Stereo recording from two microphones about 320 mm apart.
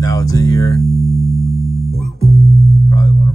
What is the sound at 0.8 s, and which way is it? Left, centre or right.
Music, centre.